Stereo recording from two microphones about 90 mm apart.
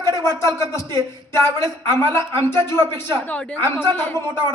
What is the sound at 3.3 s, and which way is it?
Speech, 15° left (ahead or behind).